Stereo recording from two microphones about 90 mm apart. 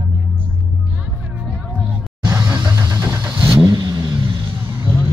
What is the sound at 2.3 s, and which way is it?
Vehicle, 45° right (ahead or behind).